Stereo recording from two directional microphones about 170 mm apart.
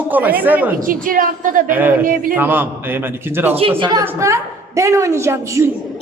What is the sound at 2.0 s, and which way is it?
Speech, 55° right (ahead or behind).